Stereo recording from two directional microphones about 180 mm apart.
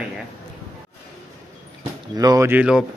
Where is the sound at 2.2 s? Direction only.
20° right (ahead or behind).